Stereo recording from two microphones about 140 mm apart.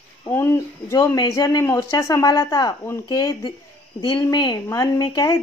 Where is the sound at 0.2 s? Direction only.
20° left (ahead or behind).